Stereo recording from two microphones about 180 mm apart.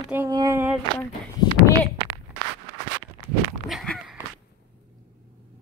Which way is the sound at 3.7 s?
Centre (ahead or behind).